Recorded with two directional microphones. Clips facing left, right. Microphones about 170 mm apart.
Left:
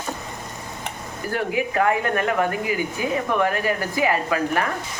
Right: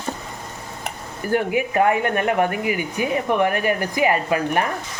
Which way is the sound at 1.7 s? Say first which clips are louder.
Right 3 dB; 20° right (ahead or behind).